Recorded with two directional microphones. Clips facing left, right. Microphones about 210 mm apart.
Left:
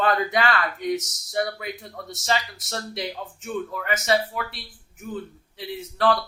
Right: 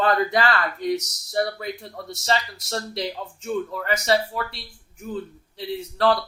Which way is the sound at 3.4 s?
30° right (ahead or behind).